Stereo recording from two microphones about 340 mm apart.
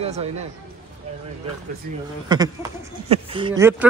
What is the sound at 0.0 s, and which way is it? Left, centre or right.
Speech, centre.